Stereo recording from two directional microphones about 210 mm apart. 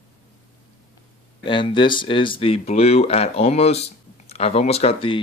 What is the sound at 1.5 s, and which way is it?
Speech, 25° left (ahead or behind).